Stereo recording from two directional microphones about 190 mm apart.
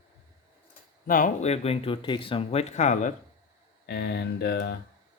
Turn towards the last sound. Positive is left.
turn(degrees=60)  # may be behind; listen again after turning